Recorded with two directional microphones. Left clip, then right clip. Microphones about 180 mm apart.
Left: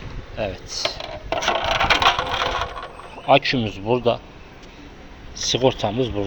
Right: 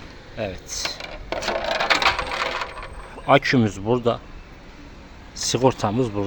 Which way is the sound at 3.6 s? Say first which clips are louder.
Right 4 dB; 40° right (ahead or behind).